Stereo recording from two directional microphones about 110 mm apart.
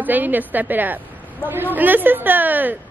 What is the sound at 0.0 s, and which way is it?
A woman's voice, 15° right (ahead or behind).